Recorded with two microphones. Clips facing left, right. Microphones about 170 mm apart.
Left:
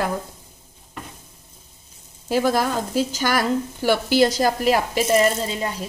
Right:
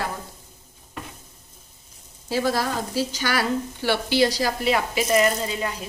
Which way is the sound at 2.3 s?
50° left (ahead or behind).